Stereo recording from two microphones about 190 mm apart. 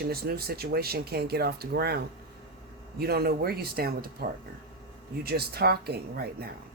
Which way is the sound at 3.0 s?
55° right (ahead or behind).